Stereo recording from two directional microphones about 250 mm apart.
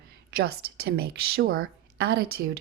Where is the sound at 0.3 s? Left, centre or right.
Right.